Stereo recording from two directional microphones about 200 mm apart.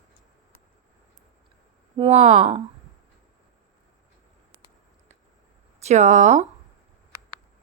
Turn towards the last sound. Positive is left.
turn(degrees=-35)  # may be behind; listen again after turning